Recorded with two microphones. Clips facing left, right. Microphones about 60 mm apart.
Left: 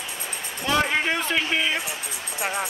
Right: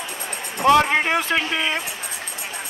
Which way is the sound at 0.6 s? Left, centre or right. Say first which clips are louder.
Right 9 dB; right.